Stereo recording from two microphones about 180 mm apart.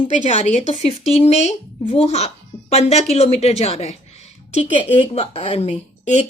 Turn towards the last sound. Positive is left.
turn(degrees=40)  # may be behind; listen again after turning